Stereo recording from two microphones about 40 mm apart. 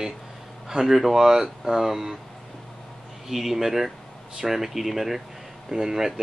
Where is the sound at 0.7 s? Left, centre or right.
Centre.